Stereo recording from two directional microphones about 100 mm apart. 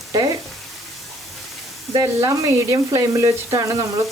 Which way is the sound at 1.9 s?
35° right (ahead or behind).